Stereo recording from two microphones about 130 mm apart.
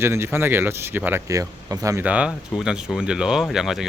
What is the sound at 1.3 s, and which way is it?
Speech, 25° right (ahead or behind).